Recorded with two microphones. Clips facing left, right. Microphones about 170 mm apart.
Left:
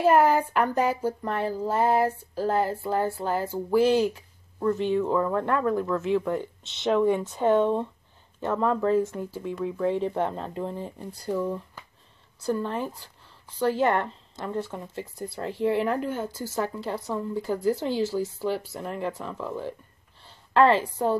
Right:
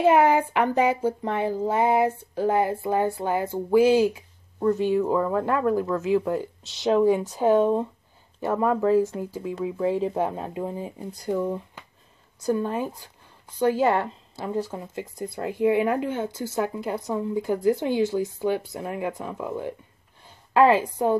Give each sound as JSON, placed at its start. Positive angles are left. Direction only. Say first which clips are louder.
{"t": 0.0, "sound": "speech", "louder": "right 1 dB", "side_deg": -15}
{"t": 20.2, "sound": "a sound", "louder": "right 2 dB", "side_deg": -10}
{"t": 20.8, "sound": "speech", "louder": "right 3 dB", "side_deg": -15}